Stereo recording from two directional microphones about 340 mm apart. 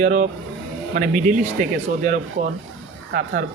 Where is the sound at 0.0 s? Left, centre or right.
Right.